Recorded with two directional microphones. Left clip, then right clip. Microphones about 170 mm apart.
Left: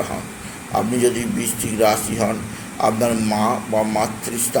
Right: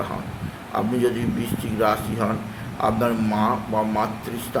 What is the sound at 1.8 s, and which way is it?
Speech, 10° left (ahead or behind).